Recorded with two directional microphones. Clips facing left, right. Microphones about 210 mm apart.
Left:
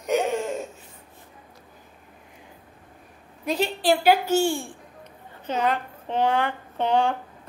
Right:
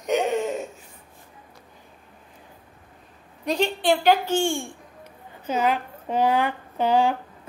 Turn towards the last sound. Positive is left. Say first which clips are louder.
# right 2 dB
turn(degrees=-10)  # may be behind; listen again after turning